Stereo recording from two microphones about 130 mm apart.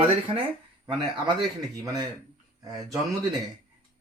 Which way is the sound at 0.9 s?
35° right (ahead or behind).